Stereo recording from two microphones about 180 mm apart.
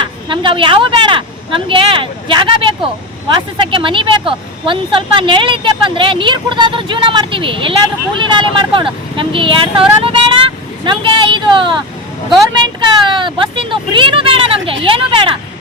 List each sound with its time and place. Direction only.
0.0 s a woman's voice: 25° right (ahead or behind)
13.1 s a woman's voice: 25° right (ahead or behind)